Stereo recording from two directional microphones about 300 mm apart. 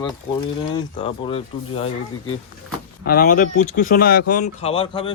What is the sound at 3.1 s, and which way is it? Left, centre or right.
Speech, left.